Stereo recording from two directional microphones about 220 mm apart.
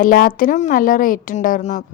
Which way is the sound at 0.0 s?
40° left (ahead or behind).